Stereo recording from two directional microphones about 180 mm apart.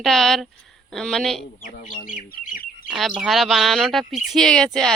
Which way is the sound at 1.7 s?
50° left (ahead or behind).